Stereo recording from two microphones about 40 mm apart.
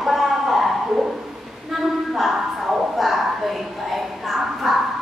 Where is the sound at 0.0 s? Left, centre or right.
Centre.